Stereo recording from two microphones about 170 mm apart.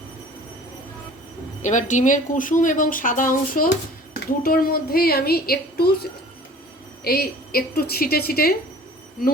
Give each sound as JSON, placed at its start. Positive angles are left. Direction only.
{"t": 1.6, "sound": "speech", "side_deg": 45}
{"t": 7.0, "sound": "speech", "side_deg": 65}